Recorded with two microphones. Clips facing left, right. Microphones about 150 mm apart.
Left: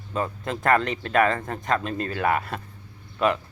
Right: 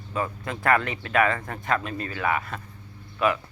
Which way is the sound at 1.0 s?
35° left (ahead or behind).